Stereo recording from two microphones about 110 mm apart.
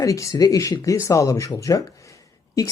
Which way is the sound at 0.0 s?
30° left (ahead or behind).